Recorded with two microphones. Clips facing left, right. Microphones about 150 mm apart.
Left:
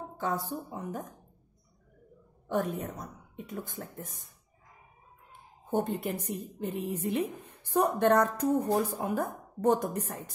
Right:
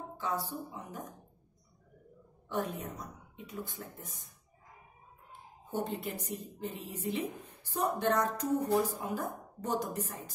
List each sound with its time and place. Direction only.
0.2 s a woman's voice: 50° left (ahead or behind)
2.4 s a woman's voice: 50° left (ahead or behind)
5.7 s a woman's voice: 55° left (ahead or behind)